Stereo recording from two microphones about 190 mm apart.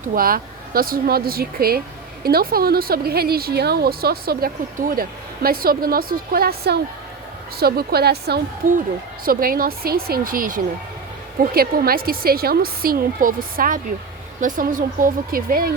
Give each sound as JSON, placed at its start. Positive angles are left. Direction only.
{"t": 0.1, "sound": "a woman's voice", "side_deg": -50}